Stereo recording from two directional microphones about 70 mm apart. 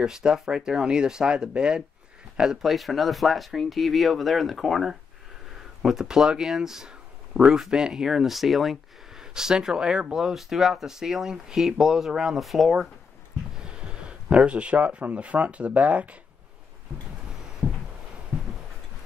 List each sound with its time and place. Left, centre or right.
0.0 s speech: centre
13.6 s speech: centre